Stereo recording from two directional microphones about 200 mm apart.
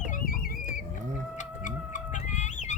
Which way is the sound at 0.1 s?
45° left (ahead or behind).